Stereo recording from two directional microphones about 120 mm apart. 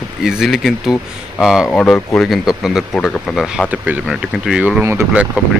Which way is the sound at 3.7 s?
10° right (ahead or behind).